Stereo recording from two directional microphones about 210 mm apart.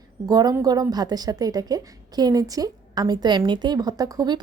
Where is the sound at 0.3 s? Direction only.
15° right (ahead or behind).